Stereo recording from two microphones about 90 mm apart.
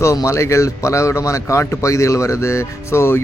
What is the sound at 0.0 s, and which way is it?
Speech, 35° left (ahead or behind).